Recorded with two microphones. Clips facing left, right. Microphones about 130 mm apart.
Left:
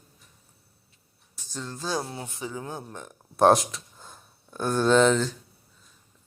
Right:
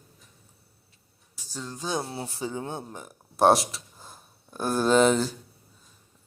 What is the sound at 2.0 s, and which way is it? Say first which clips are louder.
Speech: right 2 dB; 35° right (ahead or behind).